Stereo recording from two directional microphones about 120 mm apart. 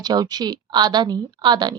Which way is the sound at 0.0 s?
35° right (ahead or behind).